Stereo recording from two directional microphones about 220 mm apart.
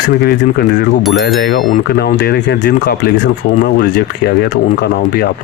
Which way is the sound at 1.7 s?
45° left (ahead or behind).